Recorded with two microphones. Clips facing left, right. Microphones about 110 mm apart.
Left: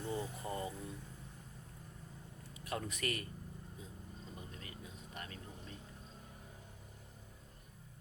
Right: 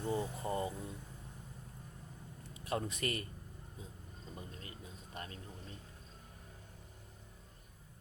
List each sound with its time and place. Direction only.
0.0 s speech: 25° right (ahead or behind)
2.5 s a man's voice: 30° right (ahead or behind)
4.4 s music: 30° right (ahead or behind)